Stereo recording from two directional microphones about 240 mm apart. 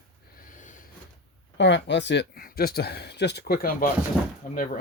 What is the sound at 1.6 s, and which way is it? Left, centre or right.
Speech, left.